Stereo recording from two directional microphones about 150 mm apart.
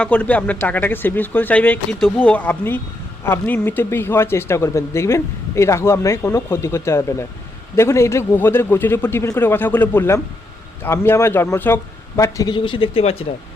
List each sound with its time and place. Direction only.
0.0 s speech: 10° left (ahead or behind); by 13.2 s 40° left (ahead or behind)